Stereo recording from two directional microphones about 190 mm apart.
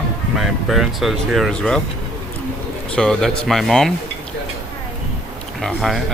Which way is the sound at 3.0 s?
5° left (ahead or behind).